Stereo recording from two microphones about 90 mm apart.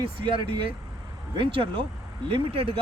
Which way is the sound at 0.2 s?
70° right (ahead or behind).